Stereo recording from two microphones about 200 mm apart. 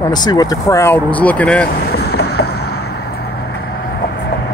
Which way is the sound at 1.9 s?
55° left (ahead or behind).